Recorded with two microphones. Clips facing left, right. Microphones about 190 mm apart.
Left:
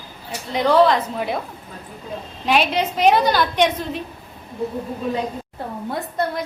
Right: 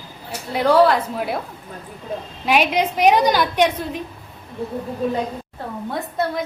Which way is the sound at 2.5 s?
10° right (ahead or behind).